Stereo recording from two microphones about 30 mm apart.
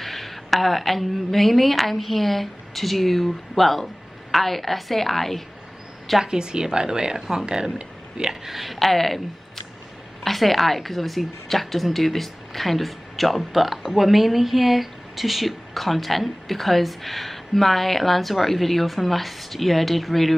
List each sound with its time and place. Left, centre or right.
0.0 s speech: centre
6.2 s a woman's voice: right
8.5 s a woman's voice: centre
8.7 s speech: centre